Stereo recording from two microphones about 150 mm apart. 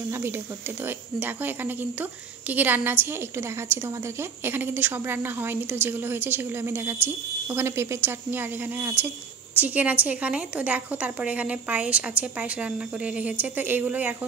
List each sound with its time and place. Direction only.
0.1 s speech: 15° right (ahead or behind)